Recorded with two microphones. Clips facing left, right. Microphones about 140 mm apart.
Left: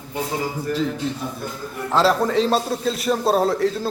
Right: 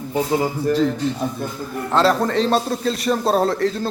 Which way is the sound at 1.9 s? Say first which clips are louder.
Right 1 dB; 5° left (ahead or behind).